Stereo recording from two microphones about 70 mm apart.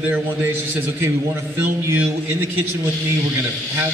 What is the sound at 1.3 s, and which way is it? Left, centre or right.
Speech, right.